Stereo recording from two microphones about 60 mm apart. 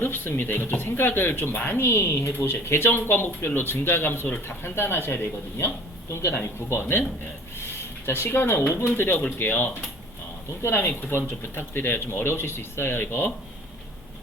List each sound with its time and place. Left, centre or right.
0.0 s speech: left
7.6 s a sound: left
8.7 s speech: left